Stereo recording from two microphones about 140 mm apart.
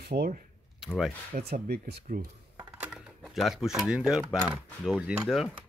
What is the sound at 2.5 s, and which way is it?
Music, 15° right (ahead or behind).